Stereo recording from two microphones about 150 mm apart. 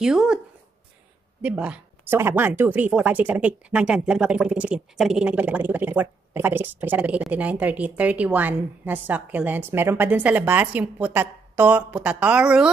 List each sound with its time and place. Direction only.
0.0 s speech: 5° right (ahead or behind)
1.4 s speech: 10° right (ahead or behind)